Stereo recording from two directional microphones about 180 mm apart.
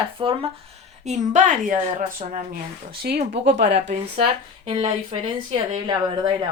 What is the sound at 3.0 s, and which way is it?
Speech, 60° right (ahead or behind).